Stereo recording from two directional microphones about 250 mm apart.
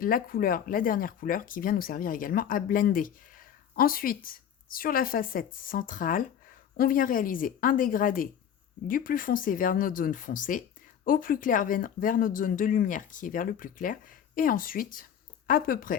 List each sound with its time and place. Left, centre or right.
0.0 s speech: left